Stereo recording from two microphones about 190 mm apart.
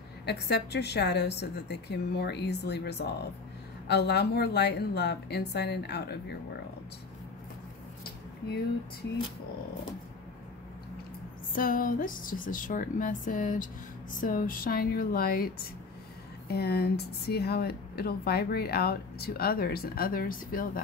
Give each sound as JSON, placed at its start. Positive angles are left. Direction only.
{"t": 0.2, "sound": "speech", "side_deg": 60}
{"t": 11.5, "sound": "speech", "side_deg": 50}